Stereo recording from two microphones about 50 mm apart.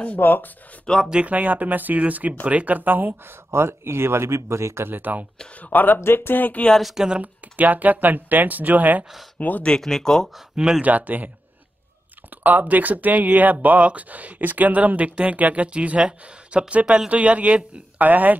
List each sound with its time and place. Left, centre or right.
0.0 s speech: left
0.9 s speech: centre
1.2 s speech: right
3.5 s a man's voice: right
4.8 s speech: right
5.6 s speech: left
5.9 s speech: left
6.8 s speech: centre
7.5 s speech: right
9.4 s speech: left
9.7 s speech: centre
10.5 s speech: centre
10.8 s speech: right
12.4 s speech: right